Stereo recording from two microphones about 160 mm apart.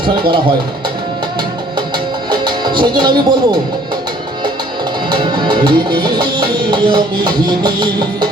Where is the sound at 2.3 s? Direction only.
30° right (ahead or behind).